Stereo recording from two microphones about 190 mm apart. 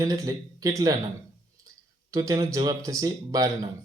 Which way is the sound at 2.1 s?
20° right (ahead or behind).